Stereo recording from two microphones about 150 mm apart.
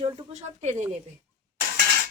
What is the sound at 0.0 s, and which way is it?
Speech, 45° right (ahead or behind).